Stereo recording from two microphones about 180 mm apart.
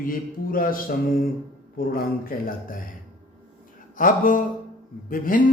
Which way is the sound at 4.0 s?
50° left (ahead or behind).